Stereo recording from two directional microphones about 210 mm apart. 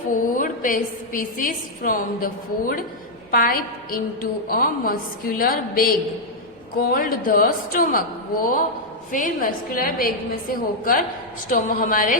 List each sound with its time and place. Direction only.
0.3 s a woman's voice: 40° left (ahead or behind)